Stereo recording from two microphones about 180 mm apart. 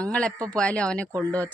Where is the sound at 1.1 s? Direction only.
20° right (ahead or behind).